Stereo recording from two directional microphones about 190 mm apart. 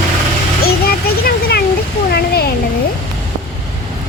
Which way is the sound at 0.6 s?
55° left (ahead or behind).